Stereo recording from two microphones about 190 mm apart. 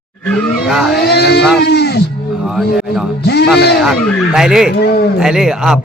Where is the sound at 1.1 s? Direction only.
60° left (ahead or behind).